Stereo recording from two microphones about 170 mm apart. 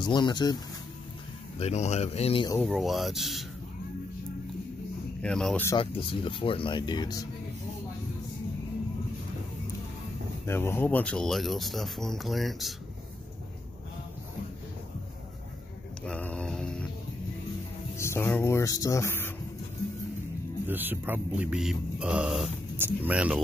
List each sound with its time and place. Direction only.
0.0 s speech: 25° left (ahead or behind)
1.6 s speech: 40° left (ahead or behind)
2.5 s speech: centre (ahead or behind)
5.2 s speech: 5° left (ahead or behind)
5.8 s speech: 30° left (ahead or behind)
10.4 s speech: 15° left (ahead or behind)
16.1 s a sound: 5° left (ahead or behind)
17.9 s speech: 15° left (ahead or behind)
20.6 s speech: 10° right (ahead or behind)